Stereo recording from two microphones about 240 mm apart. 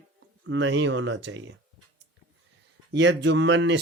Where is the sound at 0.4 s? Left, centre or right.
Right.